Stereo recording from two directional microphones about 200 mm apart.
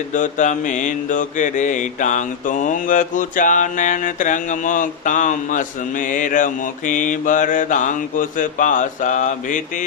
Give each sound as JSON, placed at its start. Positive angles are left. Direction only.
{"t": 0.1, "sound": "mantra", "side_deg": 40}